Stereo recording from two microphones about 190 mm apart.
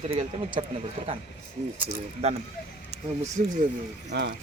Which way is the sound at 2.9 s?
65° right (ahead or behind).